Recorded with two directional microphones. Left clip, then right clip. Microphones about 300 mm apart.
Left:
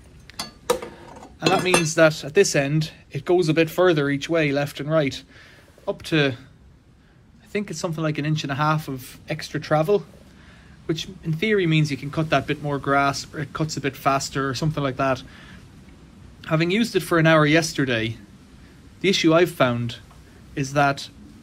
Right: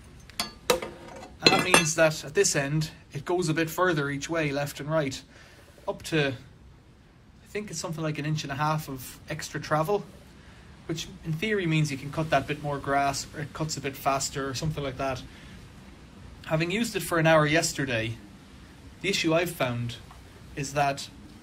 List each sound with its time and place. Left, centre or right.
0.7 s speech: centre
7.5 s speech: centre
16.3 s speech: centre